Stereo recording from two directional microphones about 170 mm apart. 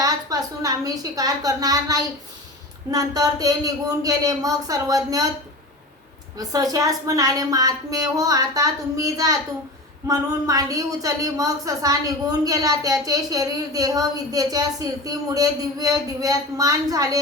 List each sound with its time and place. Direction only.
0.0 s a woman's voice: 20° right (ahead or behind)
6.3 s a woman's voice: 20° right (ahead or behind)